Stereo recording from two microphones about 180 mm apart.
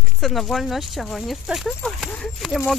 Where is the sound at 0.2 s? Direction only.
Centre (ahead or behind).